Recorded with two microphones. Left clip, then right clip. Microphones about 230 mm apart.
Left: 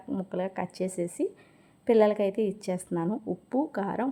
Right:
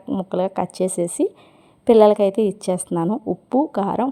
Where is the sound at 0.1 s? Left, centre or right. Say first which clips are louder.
Right 10 dB; right.